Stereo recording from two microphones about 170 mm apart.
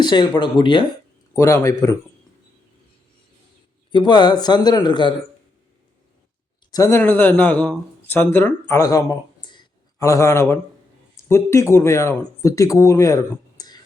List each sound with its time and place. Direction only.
0.0 s speech: 25° left (ahead or behind)
1.3 s speech: 15° left (ahead or behind)
3.9 s speech: 25° left (ahead or behind)
6.7 s speech: 20° left (ahead or behind)